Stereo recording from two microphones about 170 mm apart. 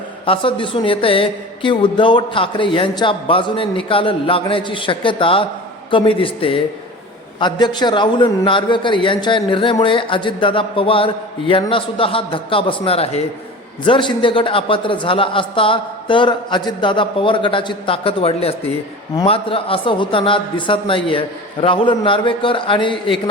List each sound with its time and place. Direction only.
0.3 s a woman's voice: 30° left (ahead or behind)